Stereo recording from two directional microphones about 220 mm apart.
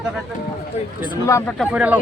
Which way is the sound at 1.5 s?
5° right (ahead or behind).